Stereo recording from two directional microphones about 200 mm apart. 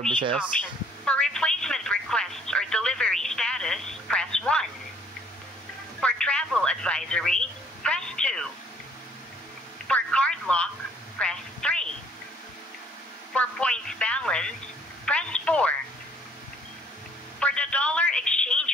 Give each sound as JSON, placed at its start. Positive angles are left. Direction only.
{"t": 0.1, "sound": "speech", "side_deg": -25}
{"t": 1.0, "sound": "telephone", "side_deg": 5}
{"t": 5.9, "sound": "radio", "side_deg": 5}
{"t": 9.8, "sound": "a sound", "side_deg": 5}
{"t": 11.1, "sound": "telephone", "side_deg": 5}
{"t": 13.3, "sound": "radio", "side_deg": 5}
{"t": 15.0, "sound": "telephone", "side_deg": 5}
{"t": 17.4, "sound": "a sound", "side_deg": 5}